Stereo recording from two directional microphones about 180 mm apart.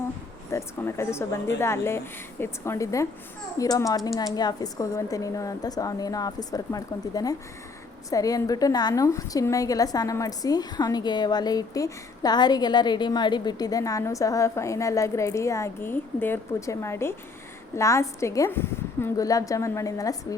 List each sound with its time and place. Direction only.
0.5 s a woman's voice: 15° left (ahead or behind)